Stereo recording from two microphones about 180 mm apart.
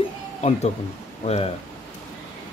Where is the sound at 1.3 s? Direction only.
35° left (ahead or behind).